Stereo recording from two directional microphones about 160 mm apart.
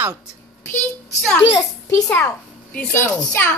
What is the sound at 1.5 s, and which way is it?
A child's voice, 15° left (ahead or behind).